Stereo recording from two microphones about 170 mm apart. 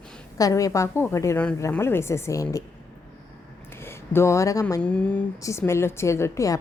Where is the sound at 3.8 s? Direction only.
15° left (ahead or behind).